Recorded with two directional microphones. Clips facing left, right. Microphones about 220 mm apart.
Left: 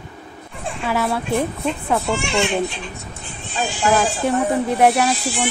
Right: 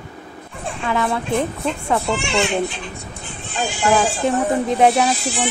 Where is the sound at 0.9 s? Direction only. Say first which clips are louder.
Even; 5° left (ahead or behind).